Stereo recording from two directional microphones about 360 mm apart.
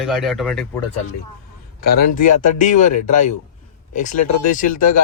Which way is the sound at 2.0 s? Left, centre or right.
Left.